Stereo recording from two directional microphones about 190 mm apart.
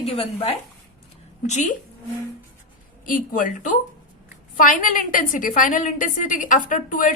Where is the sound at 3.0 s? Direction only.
45° left (ahead or behind).